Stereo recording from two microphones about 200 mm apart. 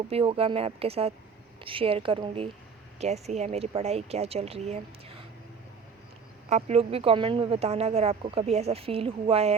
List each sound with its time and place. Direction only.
0.1 s speech: 30° right (ahead or behind)
6.5 s speech: 30° right (ahead or behind)